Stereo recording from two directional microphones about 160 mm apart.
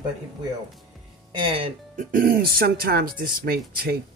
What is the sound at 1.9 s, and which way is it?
Speech, 65° right (ahead or behind).